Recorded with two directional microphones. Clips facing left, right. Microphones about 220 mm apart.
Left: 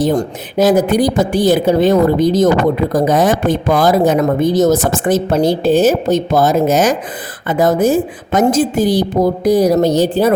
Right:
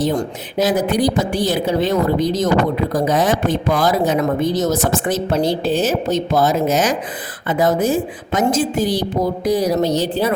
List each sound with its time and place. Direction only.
0.0 s speech: 45° left (ahead or behind)